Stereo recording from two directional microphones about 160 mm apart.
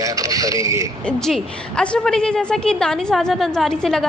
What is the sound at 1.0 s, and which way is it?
A woman's voice, 5° left (ahead or behind).